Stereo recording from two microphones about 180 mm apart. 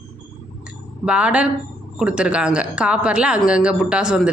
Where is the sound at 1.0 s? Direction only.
5° right (ahead or behind).